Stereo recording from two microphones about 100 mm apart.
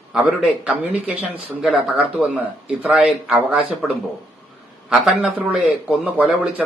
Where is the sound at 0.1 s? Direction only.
10° right (ahead or behind).